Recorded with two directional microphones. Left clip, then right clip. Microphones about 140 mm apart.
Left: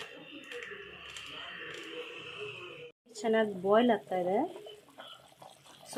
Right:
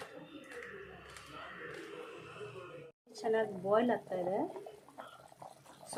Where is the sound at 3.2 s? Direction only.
65° left (ahead or behind).